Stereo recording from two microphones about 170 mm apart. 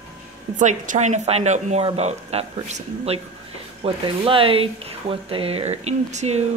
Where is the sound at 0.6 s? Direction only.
45° right (ahead or behind).